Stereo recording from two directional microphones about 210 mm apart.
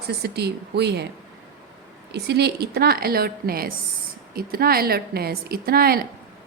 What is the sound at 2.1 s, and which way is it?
A woman's voice, 50° right (ahead or behind).